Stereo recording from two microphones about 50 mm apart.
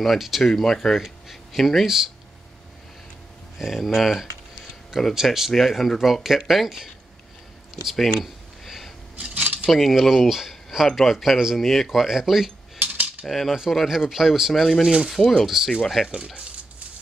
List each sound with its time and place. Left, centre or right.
0.0 s speech: centre
0.9 s speech: centre
3.5 s speech: centre
7.9 s a sound: centre
9.1 s cutlery: right
9.7 s speech: centre
12.8 s cutlery: right
13.2 s speech: centre
14.5 s speech: centre
15.4 s speech: centre